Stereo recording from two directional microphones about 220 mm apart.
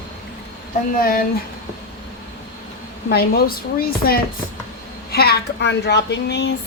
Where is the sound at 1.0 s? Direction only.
40° left (ahead or behind).